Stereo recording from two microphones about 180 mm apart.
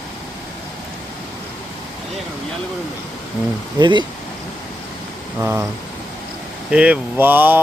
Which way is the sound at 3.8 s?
25° right (ahead or behind).